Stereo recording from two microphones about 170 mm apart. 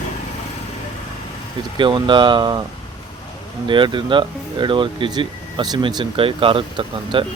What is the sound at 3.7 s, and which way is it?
Speech, 30° right (ahead or behind).